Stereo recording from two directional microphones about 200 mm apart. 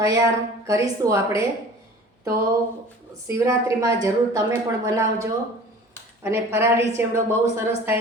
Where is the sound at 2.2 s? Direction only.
15° right (ahead or behind).